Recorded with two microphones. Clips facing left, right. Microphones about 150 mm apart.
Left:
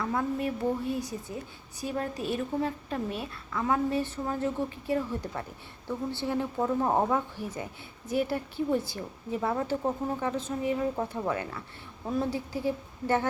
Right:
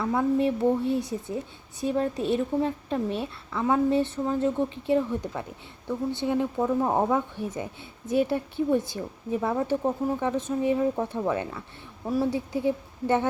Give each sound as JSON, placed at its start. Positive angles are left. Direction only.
{"t": 0.0, "sound": "a woman's voice", "side_deg": -10}
{"t": 0.3, "sound": "a woman's voice", "side_deg": -25}
{"t": 7.3, "sound": "a woman's voice", "side_deg": -20}
{"t": 12.0, "sound": "a woman's voice", "side_deg": -10}
{"t": 12.3, "sound": "a woman's voice", "side_deg": -20}